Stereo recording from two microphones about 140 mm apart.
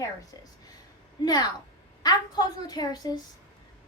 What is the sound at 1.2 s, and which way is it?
A woman's voice, 30° left (ahead or behind).